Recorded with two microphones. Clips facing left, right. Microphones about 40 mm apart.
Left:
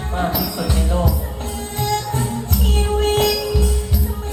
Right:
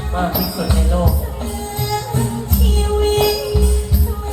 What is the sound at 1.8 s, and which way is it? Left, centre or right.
Music, left.